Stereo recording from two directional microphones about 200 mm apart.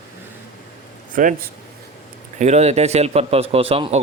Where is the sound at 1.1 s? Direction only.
40° right (ahead or behind).